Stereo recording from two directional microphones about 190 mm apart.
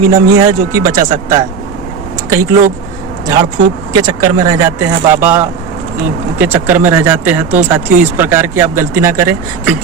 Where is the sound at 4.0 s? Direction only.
20° right (ahead or behind).